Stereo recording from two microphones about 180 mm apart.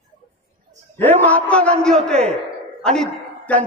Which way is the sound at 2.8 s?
5° left (ahead or behind).